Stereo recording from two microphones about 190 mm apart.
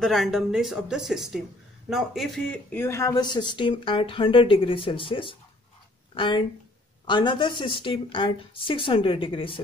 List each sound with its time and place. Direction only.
0.0 s speech: centre (ahead or behind); by 9.6 s 30° left (ahead or behind)